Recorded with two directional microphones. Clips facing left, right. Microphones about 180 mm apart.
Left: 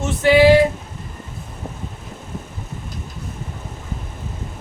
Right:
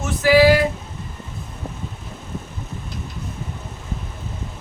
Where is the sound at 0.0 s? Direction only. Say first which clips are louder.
Left 1 dB; 25° left (ahead or behind).